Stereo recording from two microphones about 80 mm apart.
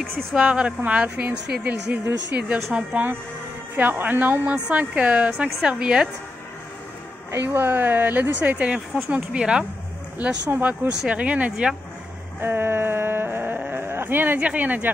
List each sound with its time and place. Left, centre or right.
0.0 s speech: centre
0.4 s speech: centre
7.2 s speech: right; by 11.7 s centre
12.4 s a sound: right